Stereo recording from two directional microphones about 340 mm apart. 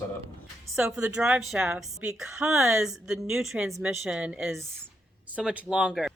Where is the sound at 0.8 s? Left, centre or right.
Centre.